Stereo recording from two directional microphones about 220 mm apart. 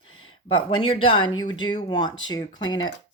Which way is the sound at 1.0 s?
20° left (ahead or behind).